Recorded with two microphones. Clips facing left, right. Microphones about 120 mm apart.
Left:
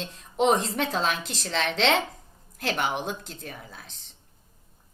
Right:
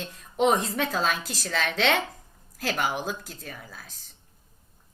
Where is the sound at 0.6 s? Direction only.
70° left (ahead or behind).